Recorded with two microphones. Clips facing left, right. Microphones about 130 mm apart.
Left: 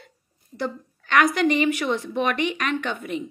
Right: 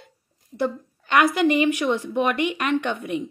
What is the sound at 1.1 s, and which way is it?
Speech, 10° right (ahead or behind).